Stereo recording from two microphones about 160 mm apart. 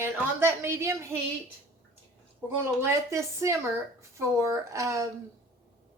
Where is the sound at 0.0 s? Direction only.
15° right (ahead or behind).